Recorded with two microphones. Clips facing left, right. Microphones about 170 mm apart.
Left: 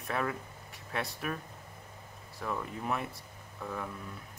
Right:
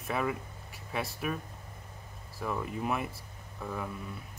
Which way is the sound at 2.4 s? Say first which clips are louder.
Right 3 dB; 5° right (ahead or behind).